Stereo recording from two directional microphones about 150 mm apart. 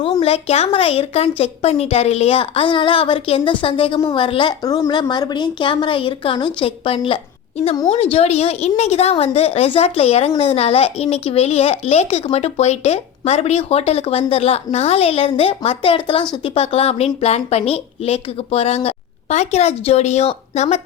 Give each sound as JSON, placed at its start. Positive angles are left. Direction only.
{"t": 0.0, "sound": "a woman's voice", "side_deg": 35}